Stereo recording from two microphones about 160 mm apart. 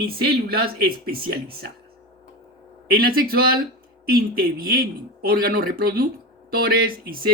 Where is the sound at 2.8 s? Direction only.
70° right (ahead or behind).